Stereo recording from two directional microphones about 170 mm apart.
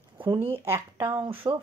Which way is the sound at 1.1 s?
35° right (ahead or behind).